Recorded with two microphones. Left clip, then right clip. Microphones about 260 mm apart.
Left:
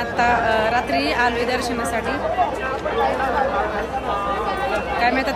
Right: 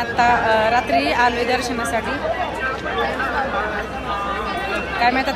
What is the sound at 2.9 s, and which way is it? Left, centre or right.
Chatter, left.